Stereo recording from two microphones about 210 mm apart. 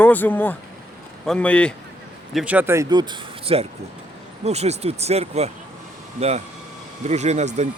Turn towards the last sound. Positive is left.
turn(degrees=-35)  # may be behind; listen again after turning